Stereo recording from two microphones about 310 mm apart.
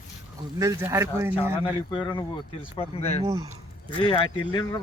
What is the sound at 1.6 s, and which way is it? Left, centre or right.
Speech, centre.